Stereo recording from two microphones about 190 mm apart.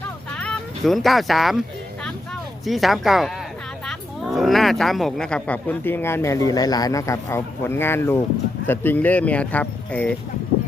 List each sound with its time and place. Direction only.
0.3 s speech: 5° left (ahead or behind)
2.6 s a woman's voice: centre (ahead or behind)